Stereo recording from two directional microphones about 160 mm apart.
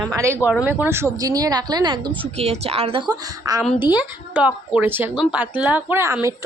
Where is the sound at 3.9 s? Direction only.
10° right (ahead or behind).